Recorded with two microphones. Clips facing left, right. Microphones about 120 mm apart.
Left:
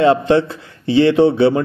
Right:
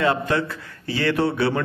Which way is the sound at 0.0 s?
25° left (ahead or behind).